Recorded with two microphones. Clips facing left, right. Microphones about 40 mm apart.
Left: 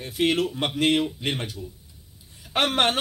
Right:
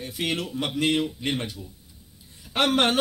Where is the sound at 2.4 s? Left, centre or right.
Left.